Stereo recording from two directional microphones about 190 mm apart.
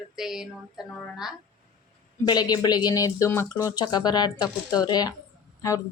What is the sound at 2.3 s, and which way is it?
Speech, 20° left (ahead or behind).